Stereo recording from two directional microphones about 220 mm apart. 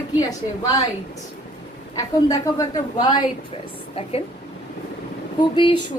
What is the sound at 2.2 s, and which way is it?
A woman's voice, 15° left (ahead or behind).